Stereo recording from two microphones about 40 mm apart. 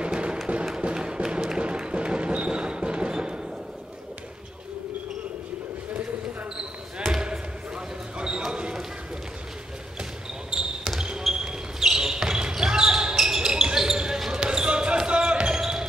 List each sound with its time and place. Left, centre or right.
0.0 s a sound: right
0.7 s music: right
7.2 s basketball bounce: right
10.5 s basketball bounce: centre